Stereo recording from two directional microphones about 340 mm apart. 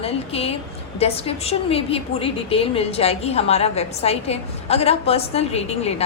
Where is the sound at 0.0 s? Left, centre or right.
Centre.